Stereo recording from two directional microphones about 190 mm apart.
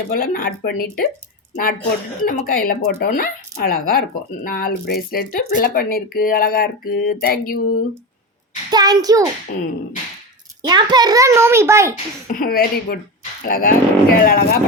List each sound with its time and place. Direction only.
0.1 s speech: 50° left (ahead or behind)
2.2 s speech: 45° left (ahead or behind)
8.7 s a child's voice: 20° right (ahead or behind)
9.5 s speech: 50° left (ahead or behind)
10.6 s a child's voice: 20° right (ahead or behind)
12.3 s speech: 50° left (ahead or behind)